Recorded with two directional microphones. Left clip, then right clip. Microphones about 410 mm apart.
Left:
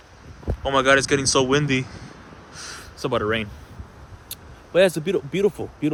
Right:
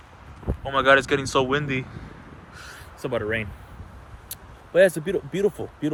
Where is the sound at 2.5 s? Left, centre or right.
Centre.